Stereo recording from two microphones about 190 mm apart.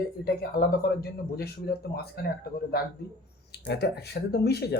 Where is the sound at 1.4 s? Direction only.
55° left (ahead or behind).